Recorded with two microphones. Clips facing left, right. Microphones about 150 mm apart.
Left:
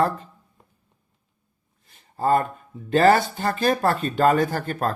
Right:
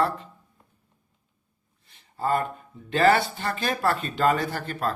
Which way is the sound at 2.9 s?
40° left (ahead or behind).